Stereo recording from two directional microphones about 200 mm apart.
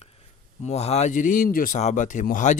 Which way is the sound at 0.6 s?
30° left (ahead or behind).